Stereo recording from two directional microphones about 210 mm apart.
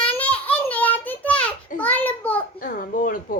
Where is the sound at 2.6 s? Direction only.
40° left (ahead or behind).